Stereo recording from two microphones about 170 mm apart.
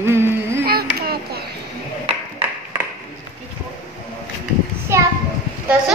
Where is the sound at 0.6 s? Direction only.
60° right (ahead or behind).